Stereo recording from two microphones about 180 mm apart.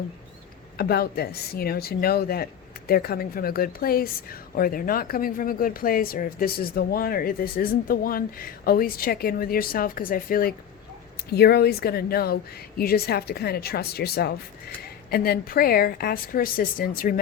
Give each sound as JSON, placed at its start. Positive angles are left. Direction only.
{"t": 0.8, "sound": "speech", "side_deg": 60}